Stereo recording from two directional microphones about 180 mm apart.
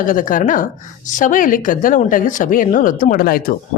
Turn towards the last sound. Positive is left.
turn(degrees=55)  # may be behind; listen again after turning